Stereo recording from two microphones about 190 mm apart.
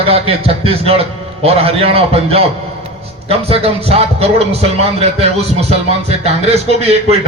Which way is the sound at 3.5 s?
30° right (ahead or behind).